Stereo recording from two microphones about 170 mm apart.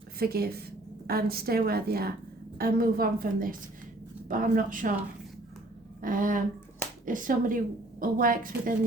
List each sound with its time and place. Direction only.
0.2 s a woman's voice: 65° right (ahead or behind)
6.0 s a woman's voice: 55° right (ahead or behind)